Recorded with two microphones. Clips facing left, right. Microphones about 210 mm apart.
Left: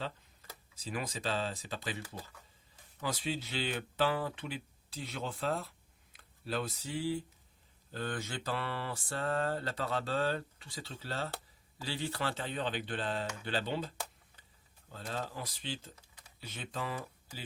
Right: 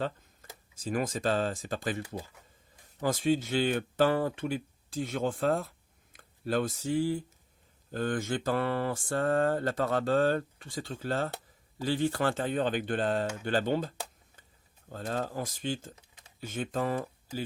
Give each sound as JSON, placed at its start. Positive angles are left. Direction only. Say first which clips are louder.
{"t": 0.4, "sound": "tick-tock", "louder": "right 2 dB", "side_deg": -50}
{"t": 0.8, "sound": "mantra", "louder": "right 8 dB", "side_deg": -50}
{"t": 3.0, "sound": "mantra", "louder": "right 9 dB", "side_deg": -50}
{"t": 6.1, "sound": "speech", "louder": "right 7 dB", "side_deg": -50}
{"t": 7.9, "sound": "mantra", "louder": "right 8 dB", "side_deg": -50}
{"t": 16.4, "sound": "speech", "louder": "right 9 dB", "side_deg": -50}